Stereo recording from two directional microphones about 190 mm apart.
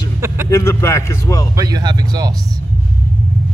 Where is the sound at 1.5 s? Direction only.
20° right (ahead or behind).